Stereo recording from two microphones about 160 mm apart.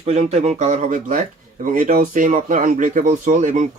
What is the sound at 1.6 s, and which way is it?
Speech, 60° right (ahead or behind).